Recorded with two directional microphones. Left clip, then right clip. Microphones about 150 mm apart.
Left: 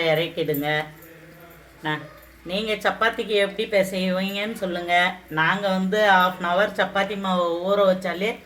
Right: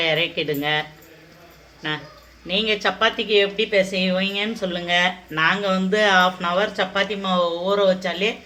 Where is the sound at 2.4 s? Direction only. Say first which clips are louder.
Right 3 dB; 10° right (ahead or behind).